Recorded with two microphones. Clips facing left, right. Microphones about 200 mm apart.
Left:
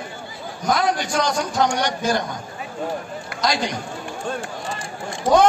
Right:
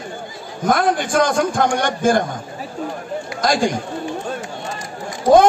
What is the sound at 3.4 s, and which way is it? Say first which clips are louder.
Speech: right 5 dB; 50° right (ahead or behind).